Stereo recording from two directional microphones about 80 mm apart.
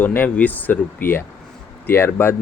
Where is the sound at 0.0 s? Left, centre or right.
Left.